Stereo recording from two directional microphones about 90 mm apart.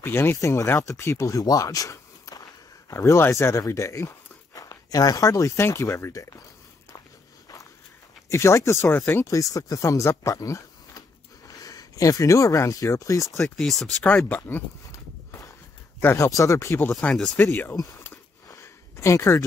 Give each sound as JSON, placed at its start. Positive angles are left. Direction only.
{"t": 0.0, "sound": "speech", "side_deg": 25}
{"t": 8.3, "sound": "speech", "side_deg": 35}
{"t": 13.6, "sound": "speech", "side_deg": 0}
{"t": 14.0, "sound": "speech", "side_deg": 20}
{"t": 14.9, "sound": "horse", "side_deg": 30}
{"t": 16.0, "sound": "speech", "side_deg": 25}
{"t": 16.3, "sound": "speech", "side_deg": 35}
{"t": 18.5, "sound": "a sound", "side_deg": 35}